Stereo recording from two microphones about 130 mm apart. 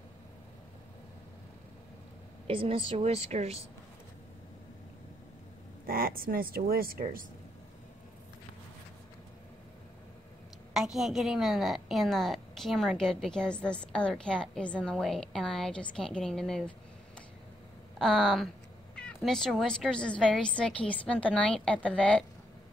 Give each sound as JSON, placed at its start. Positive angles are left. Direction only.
{"t": 2.4, "sound": "a woman's voice", "side_deg": -45}
{"t": 6.3, "sound": "speech", "side_deg": -90}
{"t": 10.7, "sound": "a woman's voice", "side_deg": 0}
{"t": 17.9, "sound": "a woman's voice", "side_deg": 0}